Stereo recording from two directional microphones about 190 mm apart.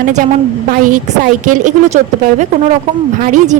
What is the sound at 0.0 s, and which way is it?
A woman's voice, 45° right (ahead or behind).